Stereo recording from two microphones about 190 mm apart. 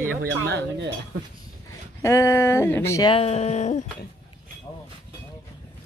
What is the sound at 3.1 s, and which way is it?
Speech, 35° left (ahead or behind).